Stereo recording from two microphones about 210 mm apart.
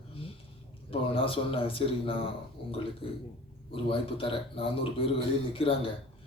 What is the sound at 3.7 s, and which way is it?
Speech, 25° left (ahead or behind).